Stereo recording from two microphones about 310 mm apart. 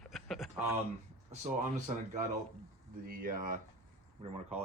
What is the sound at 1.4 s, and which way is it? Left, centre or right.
Speech, right.